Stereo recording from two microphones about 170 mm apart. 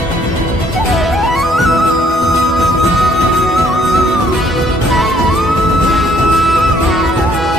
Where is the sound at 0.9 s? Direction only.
Centre (ahead or behind).